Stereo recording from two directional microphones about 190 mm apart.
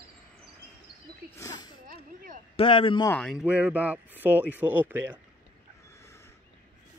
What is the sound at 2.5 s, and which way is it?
Speech, 25° left (ahead or behind).